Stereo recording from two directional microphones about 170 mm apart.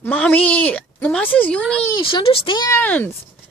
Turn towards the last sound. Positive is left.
turn(degrees=10)  # may be behind; listen again after turning